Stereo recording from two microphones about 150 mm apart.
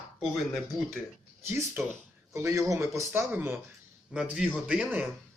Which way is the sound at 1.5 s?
15° right (ahead or behind).